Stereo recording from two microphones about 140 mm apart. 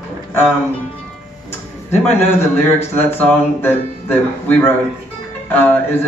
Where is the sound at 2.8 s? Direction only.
15° left (ahead or behind).